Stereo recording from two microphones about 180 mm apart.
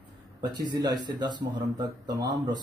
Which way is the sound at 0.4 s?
25° right (ahead or behind).